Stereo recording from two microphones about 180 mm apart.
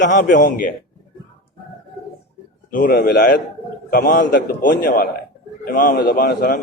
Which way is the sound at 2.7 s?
50° left (ahead or behind).